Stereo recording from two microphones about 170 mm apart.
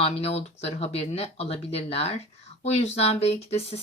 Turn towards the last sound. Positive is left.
turn(degrees=40)  # may be behind; listen again after turning